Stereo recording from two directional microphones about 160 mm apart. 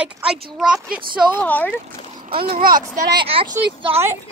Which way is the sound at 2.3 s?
35° right (ahead or behind).